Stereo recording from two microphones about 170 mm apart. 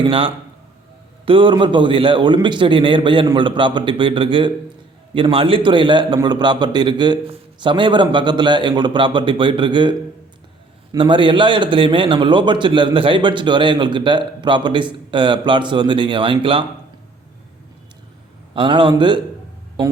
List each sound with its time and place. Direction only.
0.0 s a man's voice: 30° right (ahead or behind)
10.9 s a man's voice: 30° right (ahead or behind)
18.5 s a man's voice: 30° right (ahead or behind)